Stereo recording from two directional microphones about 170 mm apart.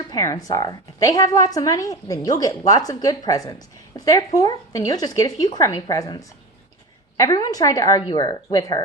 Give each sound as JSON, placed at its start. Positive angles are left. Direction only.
{"t": 0.1, "sound": "a woman's voice", "side_deg": 20}